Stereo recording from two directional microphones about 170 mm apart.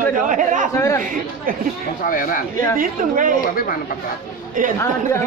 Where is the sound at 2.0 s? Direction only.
50° left (ahead or behind).